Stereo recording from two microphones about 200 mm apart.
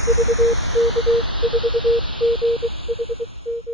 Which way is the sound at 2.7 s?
30° right (ahead or behind).